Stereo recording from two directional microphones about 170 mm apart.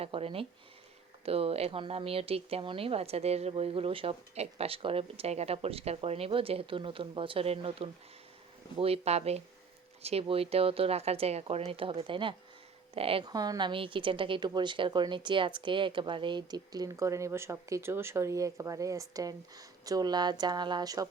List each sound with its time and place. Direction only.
0.0 s speech: 35° right (ahead or behind)